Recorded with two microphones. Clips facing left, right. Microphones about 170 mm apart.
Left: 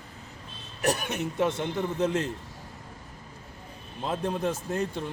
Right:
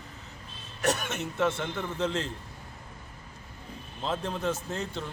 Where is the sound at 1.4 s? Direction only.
15° left (ahead or behind).